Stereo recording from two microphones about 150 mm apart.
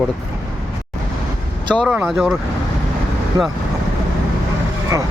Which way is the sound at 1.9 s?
5° right (ahead or behind).